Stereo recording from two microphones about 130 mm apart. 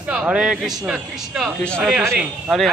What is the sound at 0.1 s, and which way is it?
A man's voice, 5° right (ahead or behind).